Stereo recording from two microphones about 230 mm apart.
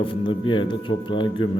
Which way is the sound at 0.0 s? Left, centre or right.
Left.